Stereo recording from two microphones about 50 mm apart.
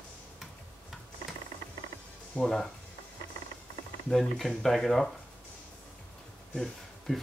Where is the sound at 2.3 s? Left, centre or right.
Left.